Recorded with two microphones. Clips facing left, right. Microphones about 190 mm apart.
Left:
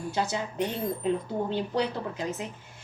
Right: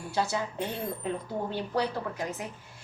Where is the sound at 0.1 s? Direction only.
20° left (ahead or behind).